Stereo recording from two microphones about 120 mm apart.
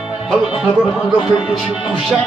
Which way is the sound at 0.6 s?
5° right (ahead or behind).